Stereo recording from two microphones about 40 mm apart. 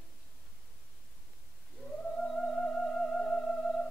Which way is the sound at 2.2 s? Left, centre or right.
Centre.